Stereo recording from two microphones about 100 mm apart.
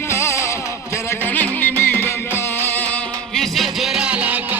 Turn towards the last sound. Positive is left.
turn(degrees=-15)  # may be behind; listen again after turning